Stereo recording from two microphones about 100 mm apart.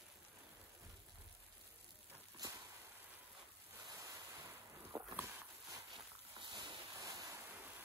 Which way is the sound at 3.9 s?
35° right (ahead or behind).